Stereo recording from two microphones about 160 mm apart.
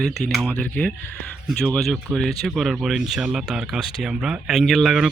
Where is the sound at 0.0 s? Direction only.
Centre (ahead or behind).